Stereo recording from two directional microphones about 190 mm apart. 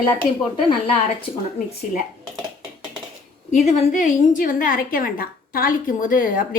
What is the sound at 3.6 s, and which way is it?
A woman's voice, 40° left (ahead or behind).